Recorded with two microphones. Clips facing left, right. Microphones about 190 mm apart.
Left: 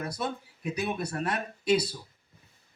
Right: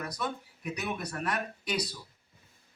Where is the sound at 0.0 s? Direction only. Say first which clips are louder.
Left 2 dB; 30° left (ahead or behind).